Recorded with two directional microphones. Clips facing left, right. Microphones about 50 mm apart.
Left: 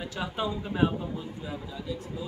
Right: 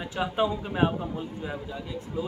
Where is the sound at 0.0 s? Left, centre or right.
Right.